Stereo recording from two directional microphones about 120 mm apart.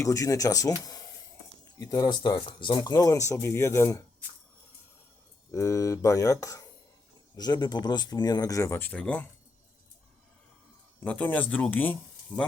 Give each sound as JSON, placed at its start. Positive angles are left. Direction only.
{"t": 0.0, "sound": "speech", "side_deg": 25}
{"t": 5.5, "sound": "speech", "side_deg": 25}
{"t": 11.0, "sound": "speech", "side_deg": 10}